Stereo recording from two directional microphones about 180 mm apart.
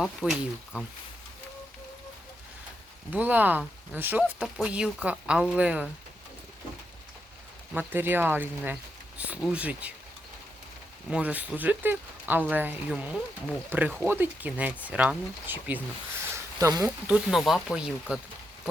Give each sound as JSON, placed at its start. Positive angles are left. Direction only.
{"t": 0.0, "sound": "speech", "side_deg": 0}
{"t": 3.1, "sound": "speech", "side_deg": -10}
{"t": 7.7, "sound": "speech", "side_deg": -10}
{"t": 11.1, "sound": "speech", "side_deg": -10}
{"t": 16.3, "sound": "a sound", "side_deg": -20}
{"t": 17.1, "sound": "speech", "side_deg": -5}